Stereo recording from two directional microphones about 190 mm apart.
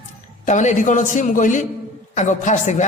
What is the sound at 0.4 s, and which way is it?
A man's voice, 40° left (ahead or behind).